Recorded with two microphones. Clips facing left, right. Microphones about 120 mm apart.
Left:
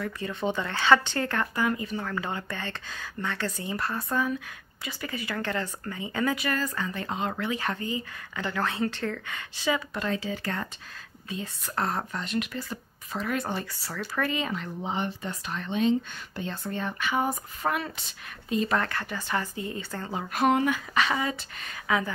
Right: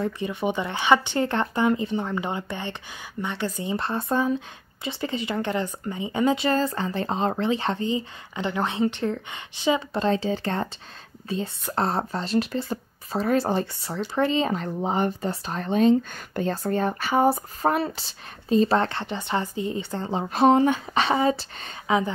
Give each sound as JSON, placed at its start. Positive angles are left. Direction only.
{"t": 0.2, "sound": "speech", "side_deg": -15}
{"t": 3.7, "sound": "speech", "side_deg": -25}